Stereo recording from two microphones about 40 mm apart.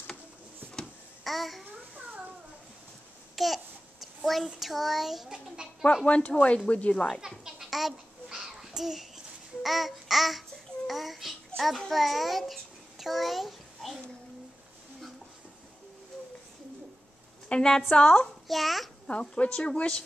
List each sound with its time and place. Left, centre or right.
1.2 s a child's voice: centre
3.3 s babbling: centre
4.6 s a sound: centre
6.0 s speech: left
7.2 s a sound: centre
11.9 s a child's voice: centre
17.5 s a woman's voice: centre
17.9 s speech: left
18.5 s a sound: centre
19.0 s speech: left